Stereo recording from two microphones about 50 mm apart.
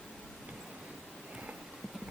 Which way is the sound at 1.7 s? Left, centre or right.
Centre.